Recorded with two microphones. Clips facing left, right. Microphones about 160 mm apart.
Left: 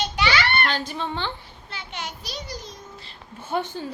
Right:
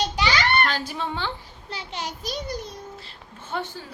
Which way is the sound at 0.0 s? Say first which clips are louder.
Even; 35° right (ahead or behind).